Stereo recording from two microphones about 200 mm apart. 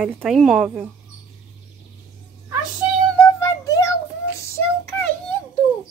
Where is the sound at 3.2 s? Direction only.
15° left (ahead or behind).